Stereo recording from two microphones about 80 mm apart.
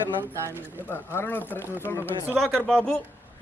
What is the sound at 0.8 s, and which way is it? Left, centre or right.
Speech, left.